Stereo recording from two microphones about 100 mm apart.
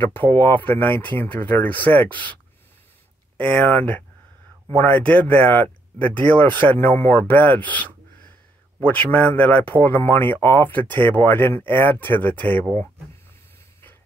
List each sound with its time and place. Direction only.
0.0 s speech: 20° left (ahead or behind)
3.3 s speech: 15° left (ahead or behind)